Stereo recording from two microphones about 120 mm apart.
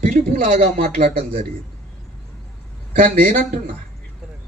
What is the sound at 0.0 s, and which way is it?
A man's voice, 80° right.